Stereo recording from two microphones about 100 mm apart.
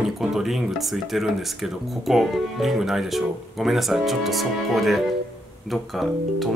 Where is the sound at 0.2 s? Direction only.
5° right (ahead or behind).